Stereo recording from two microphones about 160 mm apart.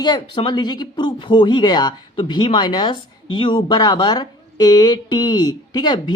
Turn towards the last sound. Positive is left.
turn(degrees=25)  # may be behind; listen again after turning